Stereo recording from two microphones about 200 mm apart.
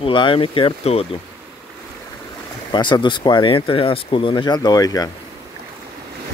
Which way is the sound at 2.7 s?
25° left (ahead or behind).